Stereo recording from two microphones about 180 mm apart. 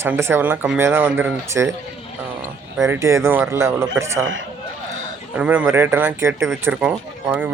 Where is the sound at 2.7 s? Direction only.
15° right (ahead or behind).